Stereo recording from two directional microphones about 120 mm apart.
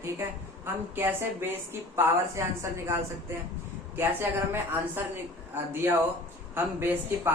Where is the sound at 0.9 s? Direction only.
20° right (ahead or behind).